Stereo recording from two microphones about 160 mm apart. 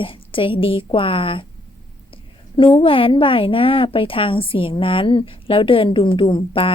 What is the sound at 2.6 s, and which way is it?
A woman's voice, 35° left (ahead or behind).